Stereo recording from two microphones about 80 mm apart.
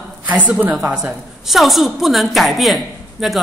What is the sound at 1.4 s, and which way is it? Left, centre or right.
A woman's voice, centre.